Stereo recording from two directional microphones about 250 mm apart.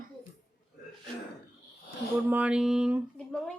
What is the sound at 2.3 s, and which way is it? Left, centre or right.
A woman's voice, centre.